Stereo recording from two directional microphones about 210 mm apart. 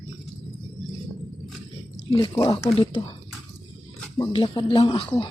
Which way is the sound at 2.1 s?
20° left (ahead or behind).